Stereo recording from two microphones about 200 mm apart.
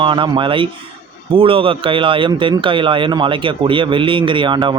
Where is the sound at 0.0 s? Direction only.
25° right (ahead or behind).